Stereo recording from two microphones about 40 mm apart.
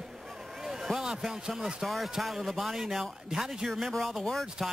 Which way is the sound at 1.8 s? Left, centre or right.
Centre.